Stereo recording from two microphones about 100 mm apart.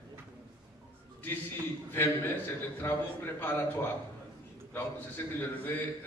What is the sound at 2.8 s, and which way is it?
Speech, 20° left (ahead or behind).